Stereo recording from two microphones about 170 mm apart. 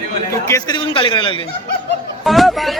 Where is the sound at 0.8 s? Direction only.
30° left (ahead or behind).